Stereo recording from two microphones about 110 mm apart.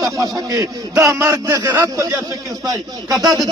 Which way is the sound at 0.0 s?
30° right (ahead or behind).